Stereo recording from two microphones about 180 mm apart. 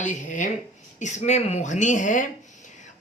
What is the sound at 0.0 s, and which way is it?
A man's voice, 45° left (ahead or behind).